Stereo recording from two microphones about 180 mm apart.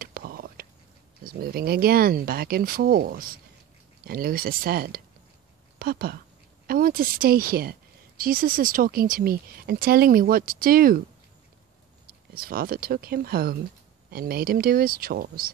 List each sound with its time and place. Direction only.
0.0 s whispering: 55° right (ahead or behind)
1.2 s speech: 55° right (ahead or behind)
12.4 s speech: 55° right (ahead or behind)